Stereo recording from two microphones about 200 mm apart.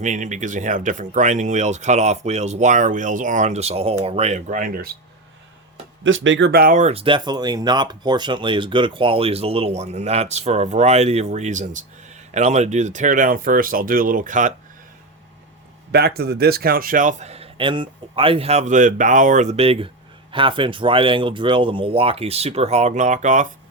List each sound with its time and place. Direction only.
0.0 s speech: 35° right (ahead or behind)
6.0 s speech: 75° right (ahead or behind); by 14.5 s 40° right (ahead or behind)
15.9 s speech: 50° right (ahead or behind)